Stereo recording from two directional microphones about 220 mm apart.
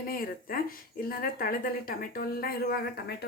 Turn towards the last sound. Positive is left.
turn(degrees=45)  # may be behind; listen again after turning